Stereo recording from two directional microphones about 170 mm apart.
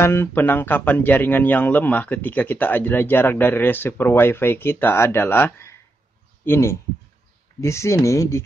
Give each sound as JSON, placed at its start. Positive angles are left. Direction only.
{"t": 0.0, "sound": "speech", "side_deg": 15}